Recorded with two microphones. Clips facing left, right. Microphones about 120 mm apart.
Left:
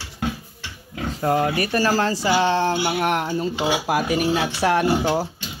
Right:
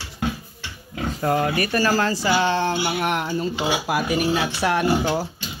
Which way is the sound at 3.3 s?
30° left (ahead or behind).